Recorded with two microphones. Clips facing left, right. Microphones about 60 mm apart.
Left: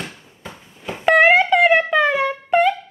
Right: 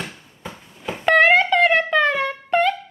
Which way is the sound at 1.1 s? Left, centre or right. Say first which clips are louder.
Left 1 dB; centre.